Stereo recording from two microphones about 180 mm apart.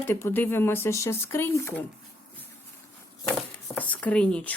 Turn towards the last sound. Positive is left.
turn(degrees=5)  # may be behind; listen again after turning